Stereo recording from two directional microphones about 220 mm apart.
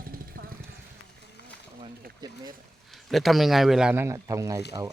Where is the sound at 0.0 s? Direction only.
40° right (ahead or behind).